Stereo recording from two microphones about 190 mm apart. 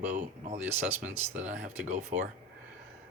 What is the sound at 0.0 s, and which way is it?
Speech, 40° right (ahead or behind).